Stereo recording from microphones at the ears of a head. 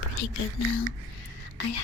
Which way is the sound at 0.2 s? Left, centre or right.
Left.